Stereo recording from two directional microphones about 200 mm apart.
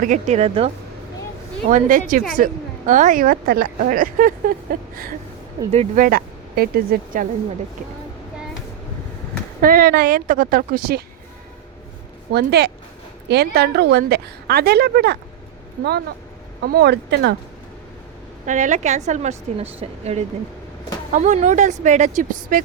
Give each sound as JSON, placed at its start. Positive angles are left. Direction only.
{"t": 0.0, "sound": "a woman's voice", "side_deg": -35}
{"t": 1.7, "sound": "a woman's voice", "side_deg": -40}
{"t": 5.7, "sound": "a woman's voice", "side_deg": -30}
{"t": 6.1, "sound": "speech", "side_deg": -50}
{"t": 9.6, "sound": "a woman's voice", "side_deg": -45}
{"t": 12.3, "sound": "a woman's voice", "side_deg": -55}
{"t": 18.4, "sound": "a woman's voice", "side_deg": -40}